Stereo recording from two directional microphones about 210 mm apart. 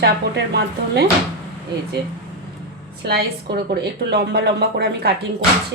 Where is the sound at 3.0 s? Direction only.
50° right (ahead or behind).